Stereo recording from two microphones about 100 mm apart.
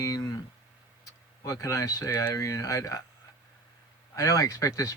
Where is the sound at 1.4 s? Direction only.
35° left (ahead or behind).